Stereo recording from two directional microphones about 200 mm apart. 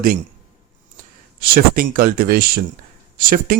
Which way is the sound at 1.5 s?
45° right (ahead or behind).